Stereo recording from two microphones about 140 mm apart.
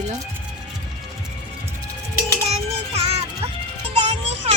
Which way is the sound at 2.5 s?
45° right (ahead or behind).